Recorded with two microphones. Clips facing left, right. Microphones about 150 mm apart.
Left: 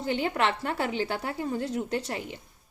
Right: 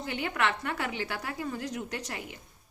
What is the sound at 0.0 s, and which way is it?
A woman's voice, 30° left (ahead or behind).